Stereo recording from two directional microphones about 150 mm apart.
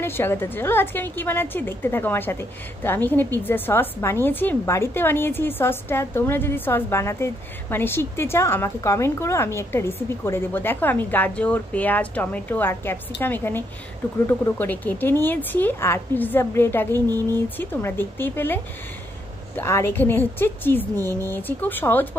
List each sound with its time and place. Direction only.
0.0 s a woman's voice: 15° left (ahead or behind)
16.9 s speech: 25° right (ahead or behind)
17.6 s a woman's voice: 15° left (ahead or behind)
20.9 s speech: 20° right (ahead or behind)
21.3 s a woman's voice: 15° left (ahead or behind)